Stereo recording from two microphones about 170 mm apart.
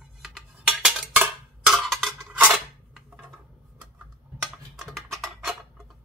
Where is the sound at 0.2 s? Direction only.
5° right (ahead or behind).